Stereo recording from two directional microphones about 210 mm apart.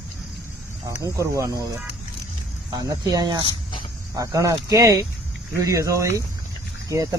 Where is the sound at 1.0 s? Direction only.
15° right (ahead or behind).